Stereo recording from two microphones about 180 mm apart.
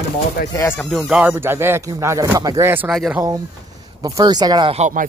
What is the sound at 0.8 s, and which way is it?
Speech, centre (ahead or behind).